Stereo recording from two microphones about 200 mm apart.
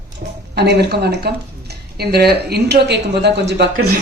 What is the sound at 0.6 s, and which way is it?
Speech, 55° right (ahead or behind).